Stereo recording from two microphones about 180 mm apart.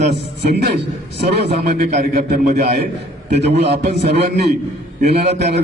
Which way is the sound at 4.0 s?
65° right (ahead or behind).